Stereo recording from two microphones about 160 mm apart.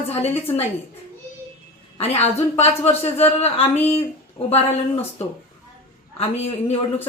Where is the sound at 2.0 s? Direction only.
40° left (ahead or behind).